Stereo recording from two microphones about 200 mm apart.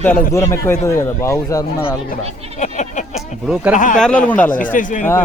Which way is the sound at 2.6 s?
35° left (ahead or behind).